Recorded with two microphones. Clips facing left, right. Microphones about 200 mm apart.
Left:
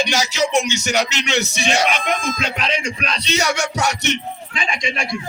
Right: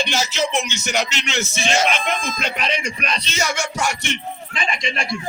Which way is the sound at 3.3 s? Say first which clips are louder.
Left 7 dB; 65° left (ahead or behind).